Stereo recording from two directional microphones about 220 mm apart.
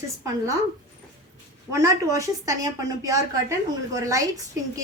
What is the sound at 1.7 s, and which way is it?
A woman's voice, 15° right (ahead or behind).